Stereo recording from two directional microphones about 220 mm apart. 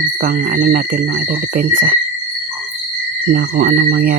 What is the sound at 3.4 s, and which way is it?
Speech, 45° right (ahead or behind).